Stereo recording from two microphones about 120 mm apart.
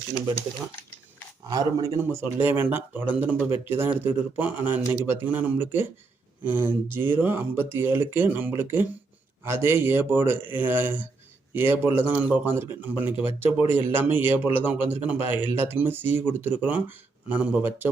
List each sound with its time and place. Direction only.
1.5 s speech: 30° right (ahead or behind)
2.0 s a man's voice: 20° right (ahead or behind)